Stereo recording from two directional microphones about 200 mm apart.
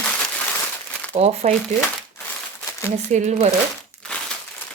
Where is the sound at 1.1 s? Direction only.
30° right (ahead or behind).